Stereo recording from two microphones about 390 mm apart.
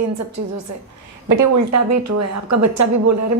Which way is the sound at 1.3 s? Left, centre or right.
Right.